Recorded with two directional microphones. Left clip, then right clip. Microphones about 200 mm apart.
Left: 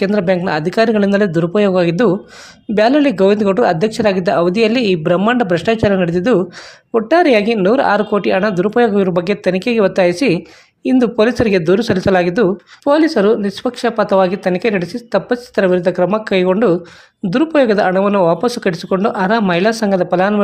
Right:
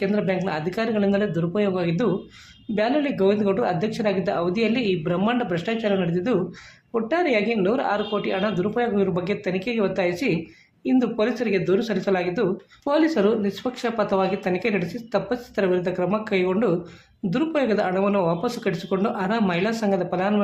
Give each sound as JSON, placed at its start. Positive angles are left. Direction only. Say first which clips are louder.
{"t": 0.0, "sound": "speech", "louder": "left 9 dB", "side_deg": 45}